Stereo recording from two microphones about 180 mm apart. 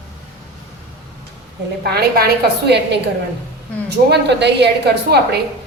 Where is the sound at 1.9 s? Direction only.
60° right (ahead or behind).